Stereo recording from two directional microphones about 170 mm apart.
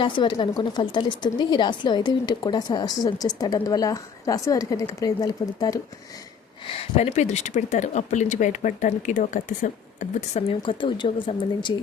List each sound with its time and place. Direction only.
0.0 s a woman's voice: 30° left (ahead or behind)
6.7 s speech: 35° left (ahead or behind)